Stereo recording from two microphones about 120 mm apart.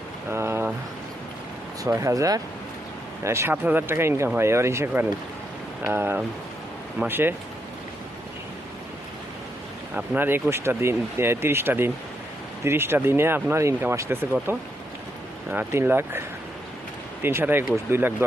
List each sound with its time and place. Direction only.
0.3 s a sound: 20° right (ahead or behind)
1.8 s speech: 25° right (ahead or behind)
9.9 s speech: 15° right (ahead or behind)
15.4 s speech: 20° right (ahead or behind)
17.2 s speech: 20° right (ahead or behind)